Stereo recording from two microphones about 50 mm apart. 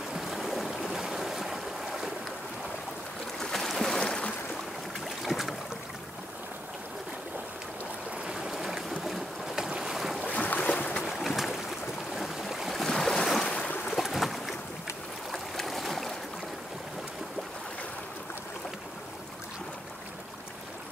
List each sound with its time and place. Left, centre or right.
0.1 s boat: centre
3.3 s boat: centre
4.0 s a sound: centre
5.2 s boat: centre
8.3 s stream: centre
9.6 s boat: centre
10.2 s boat: left
11.0 s boat: centre
12.9 s boat: centre